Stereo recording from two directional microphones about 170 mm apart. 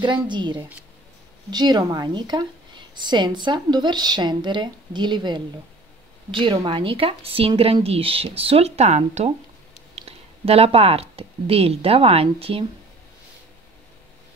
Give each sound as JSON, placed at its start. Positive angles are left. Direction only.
{"t": 0.0, "sound": "a woman's voice", "side_deg": -25}
{"t": 0.6, "sound": "speech", "side_deg": -10}
{"t": 1.5, "sound": "a woman's voice", "side_deg": -25}